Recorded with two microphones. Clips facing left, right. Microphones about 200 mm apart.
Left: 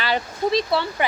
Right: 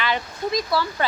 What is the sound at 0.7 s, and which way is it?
Speech, 25° left (ahead or behind).